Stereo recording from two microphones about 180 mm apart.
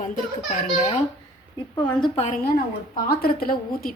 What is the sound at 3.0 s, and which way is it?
Speech, 55° left (ahead or behind).